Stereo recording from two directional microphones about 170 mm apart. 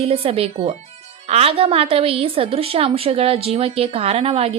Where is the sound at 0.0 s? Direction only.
35° right (ahead or behind).